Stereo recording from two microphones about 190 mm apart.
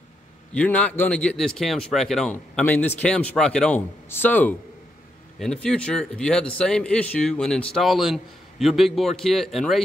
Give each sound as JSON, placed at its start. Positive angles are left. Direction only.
{"t": 0.6, "sound": "speech", "side_deg": 5}